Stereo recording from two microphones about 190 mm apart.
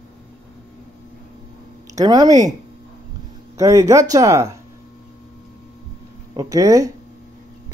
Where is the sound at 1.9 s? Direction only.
20° right (ahead or behind).